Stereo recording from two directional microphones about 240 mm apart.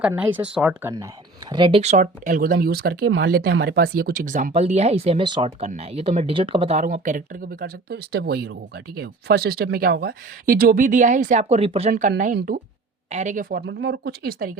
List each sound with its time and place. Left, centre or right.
0.0 s speech: centre
1.5 s speech: right